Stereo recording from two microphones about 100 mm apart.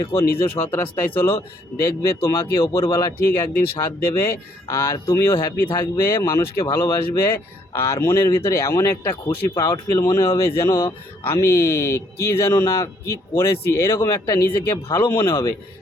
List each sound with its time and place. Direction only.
0.0 s speech: 30° left (ahead or behind)